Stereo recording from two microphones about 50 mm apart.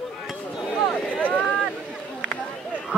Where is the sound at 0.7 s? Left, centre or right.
Left.